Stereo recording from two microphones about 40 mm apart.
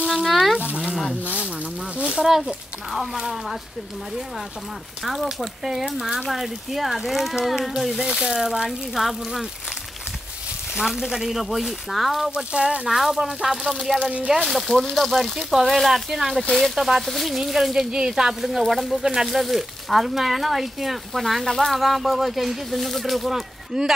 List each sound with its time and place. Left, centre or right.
0.2 s speech: centre
2.0 s speech: right
2.2 s speech: centre
5.0 s speech: centre
8.0 s speech: right
10.8 s speech: centre
12.5 s speech: right
12.8 s speech: centre
14.4 s speech: centre
17.9 s speech: centre
18.4 s speech: centre
21.7 s speech: centre
23.7 s speech: centre